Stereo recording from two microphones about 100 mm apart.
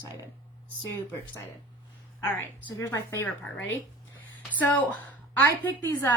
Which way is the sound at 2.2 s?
20° left (ahead or behind).